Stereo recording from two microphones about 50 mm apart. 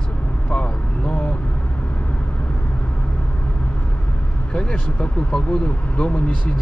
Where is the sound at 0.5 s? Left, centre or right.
Left.